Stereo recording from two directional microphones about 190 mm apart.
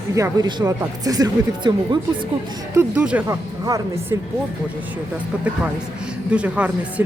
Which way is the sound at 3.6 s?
20° right (ahead or behind).